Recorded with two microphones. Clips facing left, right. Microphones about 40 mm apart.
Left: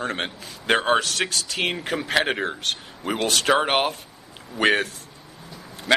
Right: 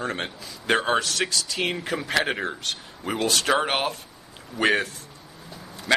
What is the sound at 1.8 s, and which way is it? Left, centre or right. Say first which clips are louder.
Speech: left 3 dB; left.